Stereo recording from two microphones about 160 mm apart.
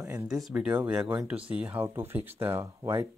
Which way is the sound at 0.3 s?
5° right (ahead or behind).